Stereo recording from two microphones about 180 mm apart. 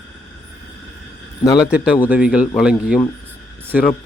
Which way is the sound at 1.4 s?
20° left (ahead or behind).